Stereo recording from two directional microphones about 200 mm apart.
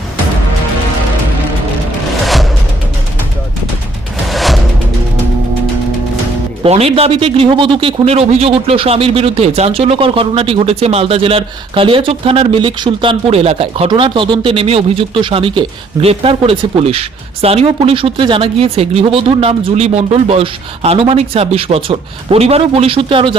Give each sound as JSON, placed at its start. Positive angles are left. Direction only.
{"t": 2.2, "sound": "music", "side_deg": 0}
{"t": 4.3, "sound": "music", "side_deg": 0}
{"t": 6.6, "sound": "speech", "side_deg": -30}